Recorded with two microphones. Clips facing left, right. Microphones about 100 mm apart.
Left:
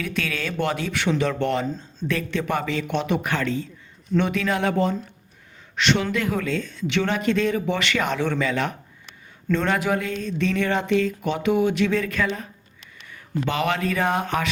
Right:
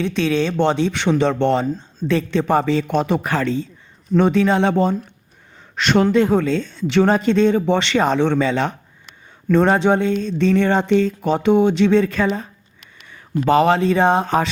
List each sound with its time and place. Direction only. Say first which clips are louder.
0.0 s speech: right 9 dB; 25° right (ahead or behind)
5.7 s a man's voice: right 6 dB; 45° right (ahead or behind)
6.1 s speech: right 9 dB; 30° right (ahead or behind)